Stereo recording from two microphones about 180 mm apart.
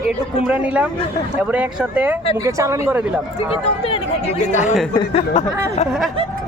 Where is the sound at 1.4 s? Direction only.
10° right (ahead or behind).